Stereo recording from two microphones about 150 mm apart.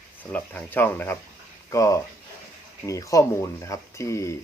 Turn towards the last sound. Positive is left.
turn(degrees=20)  # may be behind; listen again after turning